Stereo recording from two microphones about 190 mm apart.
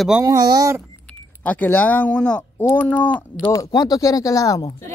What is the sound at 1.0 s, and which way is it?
Speech, 10° left (ahead or behind).